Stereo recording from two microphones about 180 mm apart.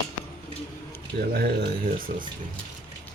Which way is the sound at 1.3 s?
60° right (ahead or behind).